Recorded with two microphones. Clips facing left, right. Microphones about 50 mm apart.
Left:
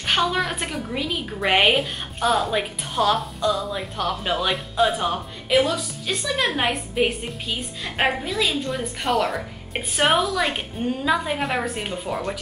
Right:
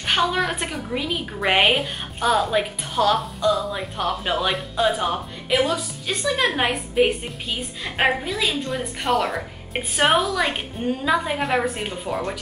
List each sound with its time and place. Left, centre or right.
0.0 s a woman's voice: centre